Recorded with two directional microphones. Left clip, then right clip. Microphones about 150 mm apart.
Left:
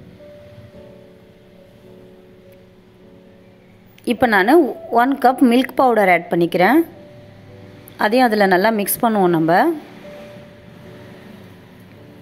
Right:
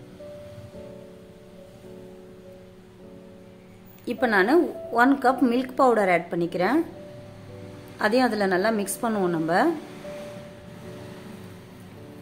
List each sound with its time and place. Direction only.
4.0 s a woman's voice: 40° left (ahead or behind)
8.0 s a woman's voice: 40° left (ahead or behind)